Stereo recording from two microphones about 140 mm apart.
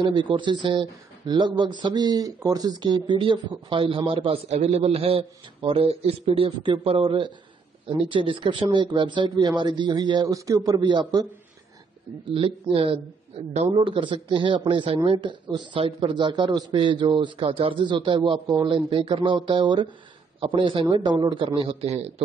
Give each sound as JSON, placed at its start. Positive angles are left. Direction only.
{"t": 0.0, "sound": "speech", "side_deg": -35}
{"t": 12.3, "sound": "speech", "side_deg": -40}